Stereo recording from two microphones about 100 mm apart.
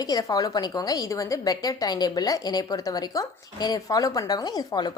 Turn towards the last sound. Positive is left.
turn(degrees=45)  # may be behind; listen again after turning